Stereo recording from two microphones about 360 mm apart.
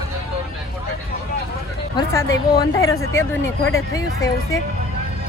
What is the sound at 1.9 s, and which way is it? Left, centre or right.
Speech, centre.